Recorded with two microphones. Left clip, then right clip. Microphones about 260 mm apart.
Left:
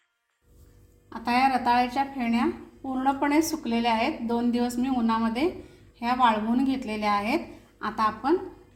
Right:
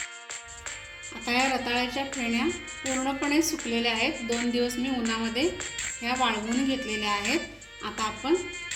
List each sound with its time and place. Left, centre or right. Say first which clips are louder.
1.2 s a woman's voice: left 3 dB; left